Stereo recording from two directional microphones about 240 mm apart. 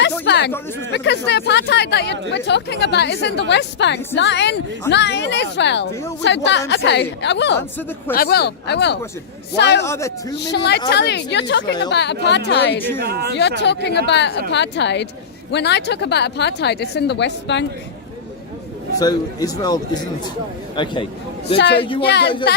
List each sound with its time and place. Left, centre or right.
0.3 s a woman's voice: left
9.8 s a man's voice: centre
10.3 s a woman's voice: left
12.7 s a man's voice: centre
13.0 s speech: right
13.6 s a woman's voice: left
18.9 s a man's voice: centre
22.0 s a woman's voice: left